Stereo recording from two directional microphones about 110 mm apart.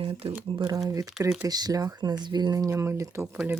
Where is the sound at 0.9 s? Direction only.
35° right (ahead or behind).